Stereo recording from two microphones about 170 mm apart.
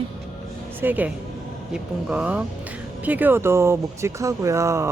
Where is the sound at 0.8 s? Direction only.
10° right (ahead or behind).